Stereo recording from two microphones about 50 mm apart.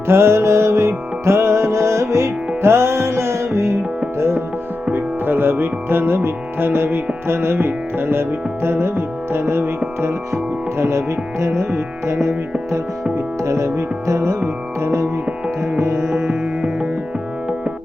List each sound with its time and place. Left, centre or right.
0.1 s music: right
4.9 s music: right
10.0 s music: right
13.1 s music: right
15.8 s music: right
16.0 s music: centre